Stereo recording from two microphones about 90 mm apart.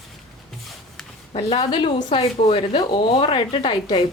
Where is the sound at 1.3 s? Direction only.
90° left.